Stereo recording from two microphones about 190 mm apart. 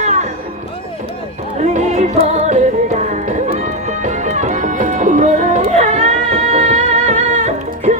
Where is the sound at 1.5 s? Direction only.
40° right (ahead or behind).